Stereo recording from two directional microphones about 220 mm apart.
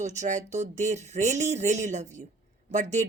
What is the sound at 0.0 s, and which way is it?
A woman's voice, 35° right (ahead or behind).